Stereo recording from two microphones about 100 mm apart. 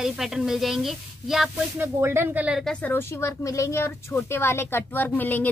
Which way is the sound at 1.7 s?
20° right (ahead or behind).